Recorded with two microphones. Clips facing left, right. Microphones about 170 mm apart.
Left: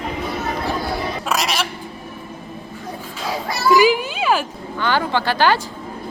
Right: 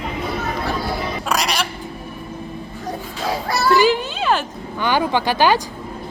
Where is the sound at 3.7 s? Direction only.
10° left (ahead or behind).